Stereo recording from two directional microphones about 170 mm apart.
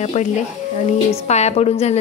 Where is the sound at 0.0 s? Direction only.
45° left (ahead or behind).